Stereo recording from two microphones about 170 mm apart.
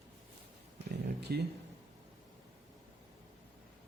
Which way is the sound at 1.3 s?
70° right (ahead or behind).